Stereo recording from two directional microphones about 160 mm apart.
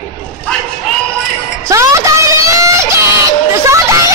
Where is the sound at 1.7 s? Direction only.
20° right (ahead or behind).